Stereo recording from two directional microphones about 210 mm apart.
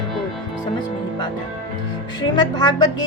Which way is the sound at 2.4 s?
20° left (ahead or behind).